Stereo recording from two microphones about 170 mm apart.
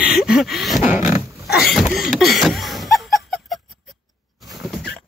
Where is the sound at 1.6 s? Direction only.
Centre (ahead or behind).